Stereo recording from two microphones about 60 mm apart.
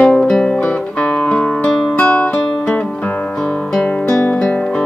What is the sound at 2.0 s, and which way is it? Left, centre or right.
Music, left.